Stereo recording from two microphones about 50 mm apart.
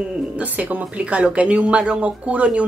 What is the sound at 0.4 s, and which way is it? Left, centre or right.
Speech, right.